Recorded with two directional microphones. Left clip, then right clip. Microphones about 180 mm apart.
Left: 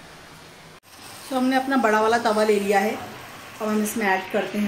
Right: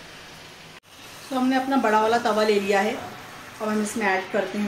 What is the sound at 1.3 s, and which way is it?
A woman's voice, 20° left (ahead or behind).